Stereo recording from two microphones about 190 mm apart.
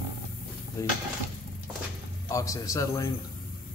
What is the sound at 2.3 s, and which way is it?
Speech, 15° left (ahead or behind).